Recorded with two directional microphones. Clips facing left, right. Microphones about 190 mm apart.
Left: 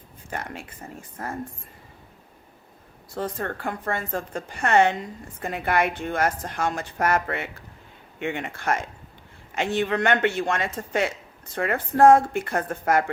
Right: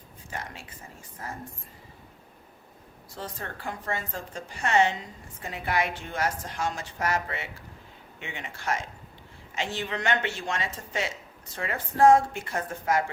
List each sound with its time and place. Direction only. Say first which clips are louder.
0.3 s a woman's voice: left 5 dB; 55° left (ahead or behind)
3.2 s a woman's voice: left 9 dB; 55° left (ahead or behind)